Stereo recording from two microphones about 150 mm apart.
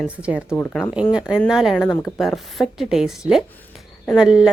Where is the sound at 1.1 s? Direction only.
5° right (ahead or behind).